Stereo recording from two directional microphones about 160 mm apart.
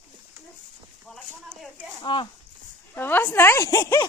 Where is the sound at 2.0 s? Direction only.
30° left (ahead or behind).